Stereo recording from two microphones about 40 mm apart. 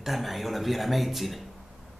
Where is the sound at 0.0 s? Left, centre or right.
Centre.